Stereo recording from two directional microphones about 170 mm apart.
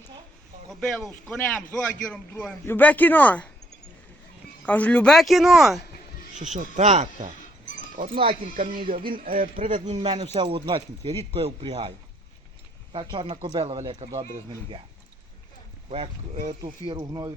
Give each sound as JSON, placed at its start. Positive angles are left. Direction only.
{"t": 0.7, "sound": "a man's voice", "side_deg": 5}
{"t": 4.6, "sound": "a man's voice", "side_deg": 10}
{"t": 6.4, "sound": "speech", "side_deg": -45}
{"t": 7.9, "sound": "speech", "side_deg": -55}
{"t": 10.0, "sound": "a man's voice", "side_deg": -25}
{"t": 12.9, "sound": "a man's voice", "side_deg": -30}
{"t": 15.9, "sound": "a man's voice", "side_deg": -35}